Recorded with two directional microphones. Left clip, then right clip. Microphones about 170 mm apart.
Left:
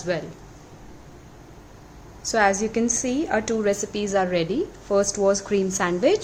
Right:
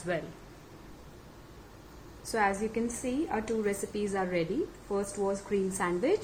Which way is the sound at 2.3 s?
25° left (ahead or behind).